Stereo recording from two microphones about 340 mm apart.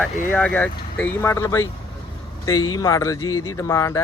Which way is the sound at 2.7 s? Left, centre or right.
Centre.